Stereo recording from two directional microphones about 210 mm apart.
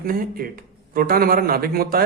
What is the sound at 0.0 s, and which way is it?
A man's voice, 45° right (ahead or behind).